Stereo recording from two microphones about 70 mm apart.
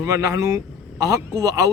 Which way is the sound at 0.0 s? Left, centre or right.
Right.